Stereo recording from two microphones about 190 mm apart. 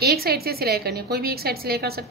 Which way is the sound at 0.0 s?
55° right (ahead or behind).